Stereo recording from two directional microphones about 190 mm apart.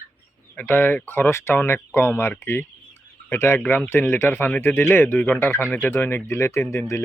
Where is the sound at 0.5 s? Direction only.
10° left (ahead or behind).